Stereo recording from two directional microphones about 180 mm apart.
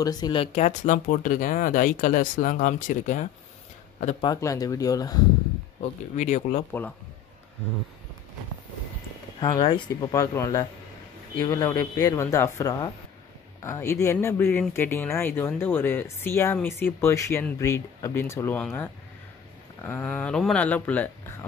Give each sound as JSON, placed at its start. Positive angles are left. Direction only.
{"t": 0.0, "sound": "speech", "side_deg": 20}
{"t": 4.2, "sound": "speech", "side_deg": 20}
{"t": 5.8, "sound": "speech", "side_deg": 40}
{"t": 9.4, "sound": "speech", "side_deg": 25}